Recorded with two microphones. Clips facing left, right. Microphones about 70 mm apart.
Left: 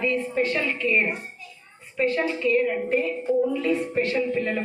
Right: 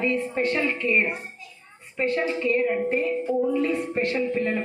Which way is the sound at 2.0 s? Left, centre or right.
Right.